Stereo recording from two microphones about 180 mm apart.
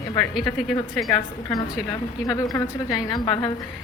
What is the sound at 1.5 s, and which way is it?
A woman's voice, 20° left (ahead or behind).